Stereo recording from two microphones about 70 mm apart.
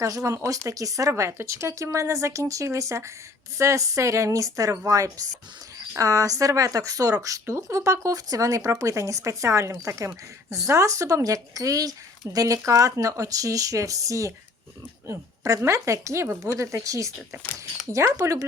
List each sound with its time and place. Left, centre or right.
0.0 s speech: right